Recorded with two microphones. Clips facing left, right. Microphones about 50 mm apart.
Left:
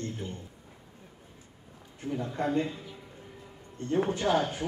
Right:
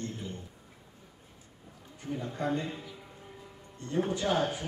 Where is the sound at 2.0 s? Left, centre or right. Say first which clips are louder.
Left 3 dB; left.